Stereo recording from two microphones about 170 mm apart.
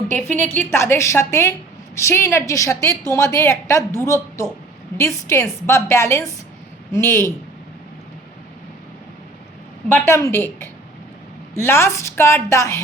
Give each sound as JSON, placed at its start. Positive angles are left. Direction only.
{"t": 0.1, "sound": "a woman's voice", "side_deg": 10}
{"t": 9.9, "sound": "a woman's voice", "side_deg": 15}